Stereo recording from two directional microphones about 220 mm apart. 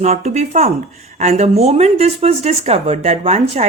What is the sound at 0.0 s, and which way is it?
Speech, 30° right (ahead or behind).